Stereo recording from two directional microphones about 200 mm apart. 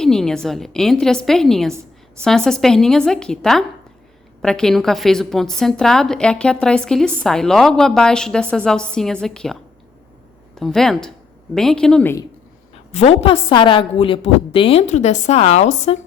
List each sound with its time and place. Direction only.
0.0 s a woman's voice: centre (ahead or behind)
12.9 s a woman's voice: 30° left (ahead or behind)